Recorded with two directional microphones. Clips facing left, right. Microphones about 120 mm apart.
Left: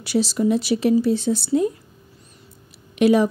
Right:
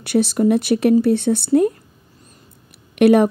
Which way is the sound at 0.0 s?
55° right (ahead or behind).